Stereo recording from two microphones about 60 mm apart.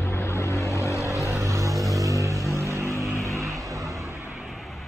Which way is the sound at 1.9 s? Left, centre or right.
Right.